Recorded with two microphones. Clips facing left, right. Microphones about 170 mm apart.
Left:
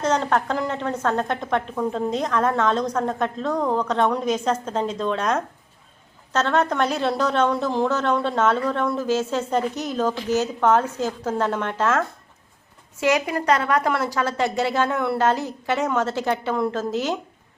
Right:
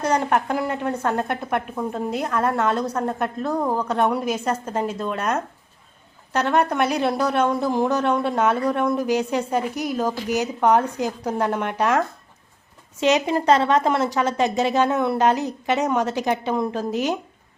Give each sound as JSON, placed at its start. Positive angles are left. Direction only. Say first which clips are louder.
{"t": 0.0, "sound": "a woman's voice", "louder": "even", "side_deg": -10}